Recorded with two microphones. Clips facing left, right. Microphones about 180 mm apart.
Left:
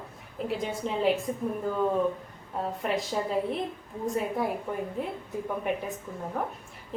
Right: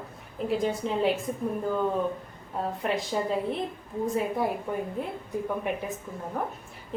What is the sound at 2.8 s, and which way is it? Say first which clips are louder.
A woman's voice: right 1 dB; centre (ahead or behind).